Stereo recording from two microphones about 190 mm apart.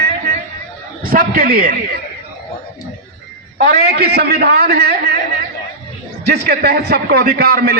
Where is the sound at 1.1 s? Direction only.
50° right (ahead or behind).